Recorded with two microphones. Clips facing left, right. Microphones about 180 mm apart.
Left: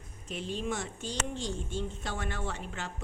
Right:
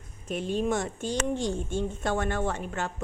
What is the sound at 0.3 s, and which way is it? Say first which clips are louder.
Speech: right 7 dB; 50° right (ahead or behind).